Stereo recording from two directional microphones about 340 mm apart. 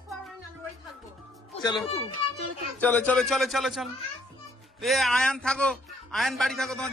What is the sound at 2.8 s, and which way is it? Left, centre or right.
A man's voice, centre.